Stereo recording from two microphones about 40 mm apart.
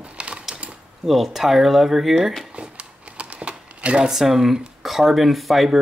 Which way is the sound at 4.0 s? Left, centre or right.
Centre.